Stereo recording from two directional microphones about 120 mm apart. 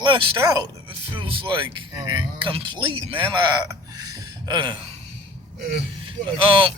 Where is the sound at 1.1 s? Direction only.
45° right (ahead or behind).